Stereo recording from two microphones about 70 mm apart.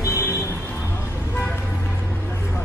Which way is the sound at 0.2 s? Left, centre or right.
Left.